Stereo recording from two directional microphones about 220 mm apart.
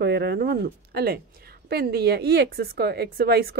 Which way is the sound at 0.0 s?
50° right (ahead or behind).